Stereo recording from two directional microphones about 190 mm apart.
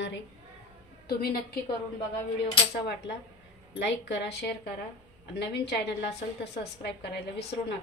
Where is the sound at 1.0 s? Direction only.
55° left (ahead or behind).